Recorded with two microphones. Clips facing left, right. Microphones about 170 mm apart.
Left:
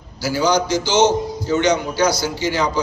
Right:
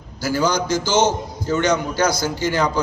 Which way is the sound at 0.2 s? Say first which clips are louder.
Left 2 dB; 50° right (ahead or behind).